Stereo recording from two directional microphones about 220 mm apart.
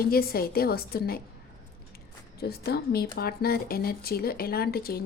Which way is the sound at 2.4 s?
45° left (ahead or behind).